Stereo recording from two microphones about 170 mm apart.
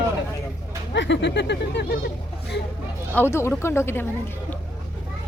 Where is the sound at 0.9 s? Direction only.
90° left.